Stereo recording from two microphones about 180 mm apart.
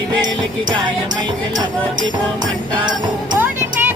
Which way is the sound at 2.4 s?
25° right (ahead or behind).